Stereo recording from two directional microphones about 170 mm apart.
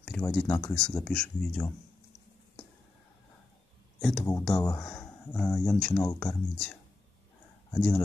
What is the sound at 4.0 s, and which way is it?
Speech, centre (ahead or behind).